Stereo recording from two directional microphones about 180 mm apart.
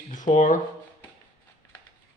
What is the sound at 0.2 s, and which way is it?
Speech, 45° left (ahead or behind).